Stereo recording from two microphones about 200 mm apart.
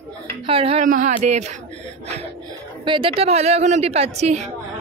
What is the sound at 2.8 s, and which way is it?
Speech, 25° right (ahead or behind).